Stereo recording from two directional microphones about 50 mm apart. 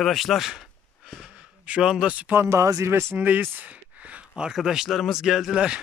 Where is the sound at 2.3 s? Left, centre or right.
Right.